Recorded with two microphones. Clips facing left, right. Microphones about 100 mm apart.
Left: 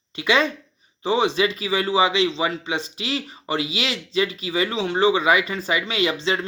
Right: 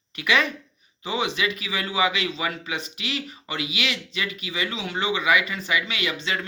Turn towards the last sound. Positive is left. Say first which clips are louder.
# left 6 dB
turn(degrees=30)  # may be behind; listen again after turning